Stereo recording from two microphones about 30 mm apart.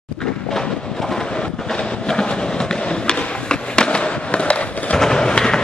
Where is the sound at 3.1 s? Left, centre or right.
Left.